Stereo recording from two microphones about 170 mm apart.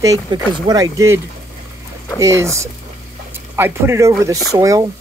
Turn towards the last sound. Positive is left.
turn(degrees=-20)  # may be behind; listen again after turning